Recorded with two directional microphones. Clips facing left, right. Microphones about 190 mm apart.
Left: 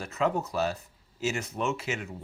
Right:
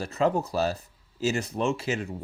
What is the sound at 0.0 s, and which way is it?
Speech, 35° right (ahead or behind).